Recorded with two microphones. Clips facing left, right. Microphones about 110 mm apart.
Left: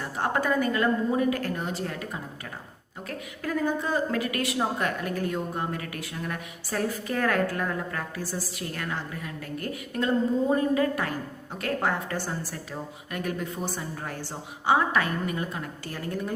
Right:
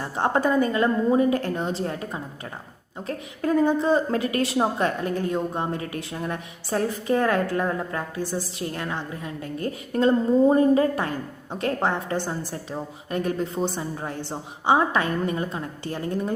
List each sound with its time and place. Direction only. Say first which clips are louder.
0.0 s a woman's voice: right 5 dB; 25° right (ahead or behind)
3.1 s a woman's voice: right 7 dB; 25° right (ahead or behind)